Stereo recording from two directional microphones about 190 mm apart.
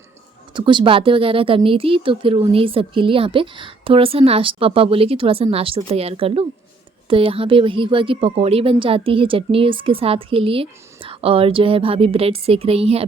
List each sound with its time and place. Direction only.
0.5 s speech: 25° right (ahead or behind)